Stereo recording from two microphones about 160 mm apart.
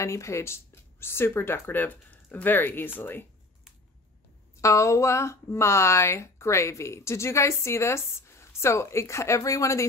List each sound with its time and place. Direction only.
0.0 s speech: 20° left (ahead or behind)
4.6 s speech: 20° left (ahead or behind)